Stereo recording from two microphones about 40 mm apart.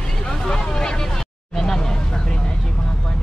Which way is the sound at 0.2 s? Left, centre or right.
Centre.